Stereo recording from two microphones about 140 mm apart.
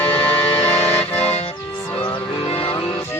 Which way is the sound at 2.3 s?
40° left (ahead or behind).